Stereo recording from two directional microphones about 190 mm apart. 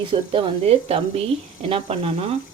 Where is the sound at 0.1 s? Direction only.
25° right (ahead or behind).